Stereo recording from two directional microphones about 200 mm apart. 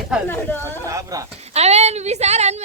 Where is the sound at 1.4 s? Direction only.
30° right (ahead or behind).